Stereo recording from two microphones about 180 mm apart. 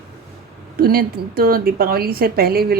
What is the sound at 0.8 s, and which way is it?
A woman's voice, 55° right (ahead or behind).